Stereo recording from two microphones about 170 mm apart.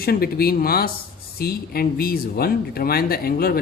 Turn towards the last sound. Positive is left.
turn(degrees=60)  # may be behind; listen again after turning